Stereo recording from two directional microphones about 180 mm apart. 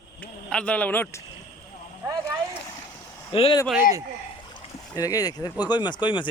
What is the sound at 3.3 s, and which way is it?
Speech, 30° left (ahead or behind).